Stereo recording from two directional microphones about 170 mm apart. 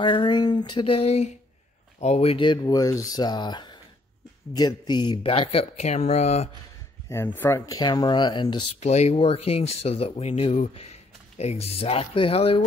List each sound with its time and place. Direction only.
0.0 s speech: 25° left (ahead or behind)
7.1 s speech: 15° left (ahead or behind)
7.8 s speech: 25° left (ahead or behind)
8.7 s speech: 40° left (ahead or behind)